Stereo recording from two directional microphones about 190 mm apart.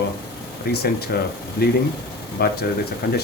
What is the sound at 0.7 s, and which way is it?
Speech, 55° left (ahead or behind).